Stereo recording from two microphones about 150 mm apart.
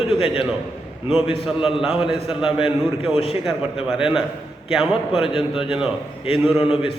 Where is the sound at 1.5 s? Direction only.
5° right (ahead or behind).